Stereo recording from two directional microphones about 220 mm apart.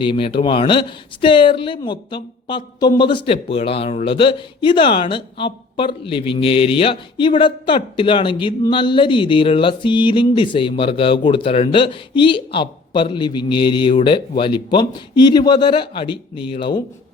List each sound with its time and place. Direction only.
0.0 s speech: 20° left (ahead or behind)